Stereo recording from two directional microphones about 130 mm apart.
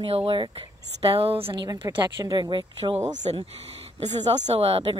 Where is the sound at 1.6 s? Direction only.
35° right (ahead or behind).